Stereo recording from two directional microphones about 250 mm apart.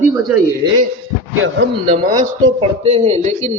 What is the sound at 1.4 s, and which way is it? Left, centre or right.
Speech, right.